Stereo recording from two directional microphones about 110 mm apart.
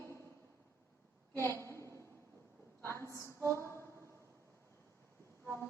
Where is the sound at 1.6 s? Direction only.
25° left (ahead or behind).